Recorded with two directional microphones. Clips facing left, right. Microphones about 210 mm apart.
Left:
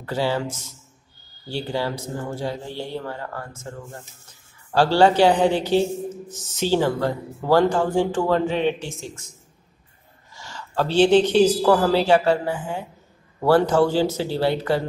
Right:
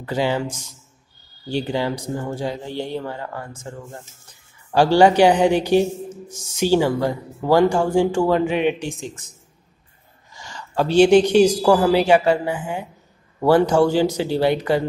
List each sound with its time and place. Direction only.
0.0 s a woman's voice: 15° right (ahead or behind)
4.7 s a woman's voice: 15° right (ahead or behind)
10.3 s a woman's voice: 15° right (ahead or behind)